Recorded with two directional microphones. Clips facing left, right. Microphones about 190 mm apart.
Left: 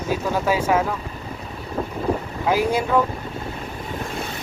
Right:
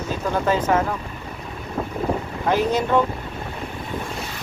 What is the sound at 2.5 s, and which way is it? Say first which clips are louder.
Speech: even; 10° left (ahead or behind).